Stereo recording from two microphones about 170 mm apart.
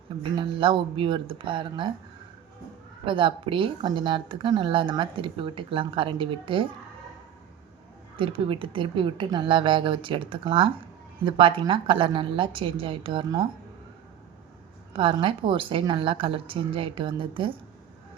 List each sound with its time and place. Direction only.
0.2 s speech: 30° right (ahead or behind)
3.1 s speech: 30° right (ahead or behind)
8.1 s speech: 30° right (ahead or behind)
14.9 s speech: 30° right (ahead or behind)